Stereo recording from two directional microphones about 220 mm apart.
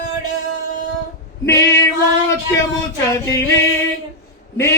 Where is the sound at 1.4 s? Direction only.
15° left (ahead or behind).